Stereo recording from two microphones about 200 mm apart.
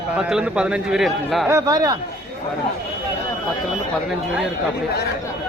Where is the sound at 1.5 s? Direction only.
20° right (ahead or behind).